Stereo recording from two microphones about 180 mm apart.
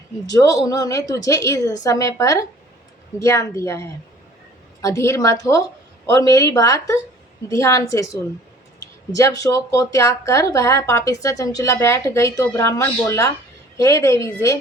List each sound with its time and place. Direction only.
0.3 s a woman's voice: 20° left (ahead or behind)